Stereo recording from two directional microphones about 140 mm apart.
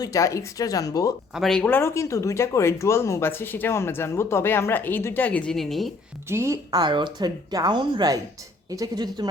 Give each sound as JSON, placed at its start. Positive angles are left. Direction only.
{"t": 0.0, "sound": "speech", "side_deg": 25}
{"t": 1.3, "sound": "speech", "side_deg": 0}
{"t": 6.2, "sound": "speech", "side_deg": -20}
{"t": 6.8, "sound": "speech", "side_deg": -35}